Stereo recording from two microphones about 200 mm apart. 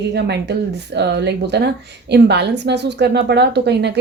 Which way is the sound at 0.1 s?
55° right (ahead or behind).